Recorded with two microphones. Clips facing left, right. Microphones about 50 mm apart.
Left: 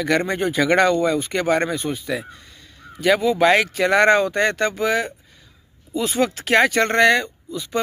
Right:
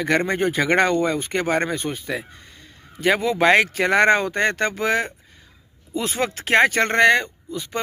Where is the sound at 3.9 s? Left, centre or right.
Right.